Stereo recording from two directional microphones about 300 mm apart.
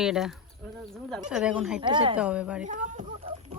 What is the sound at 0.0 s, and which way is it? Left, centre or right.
Speech, centre.